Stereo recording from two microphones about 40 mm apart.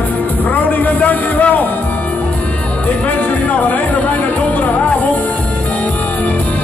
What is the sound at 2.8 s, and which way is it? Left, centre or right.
Music, left.